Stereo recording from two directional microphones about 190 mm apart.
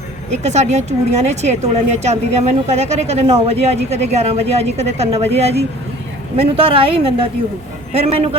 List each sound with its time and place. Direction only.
0.4 s a woman's voice: 35° right (ahead or behind)